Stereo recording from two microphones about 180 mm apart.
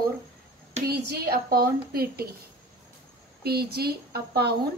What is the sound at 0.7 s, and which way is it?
A woman's voice, 60° right (ahead or behind).